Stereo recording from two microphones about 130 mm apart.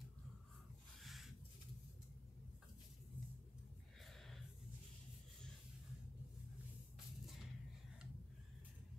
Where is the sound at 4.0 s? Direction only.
Centre (ahead or behind).